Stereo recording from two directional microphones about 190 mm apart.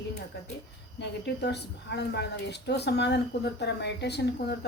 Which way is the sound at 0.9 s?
60° left (ahead or behind).